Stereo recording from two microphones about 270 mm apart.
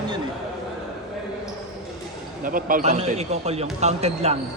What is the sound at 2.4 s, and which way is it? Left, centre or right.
A man's voice, right.